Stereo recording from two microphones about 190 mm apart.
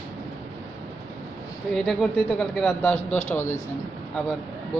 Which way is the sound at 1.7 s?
5° left (ahead or behind).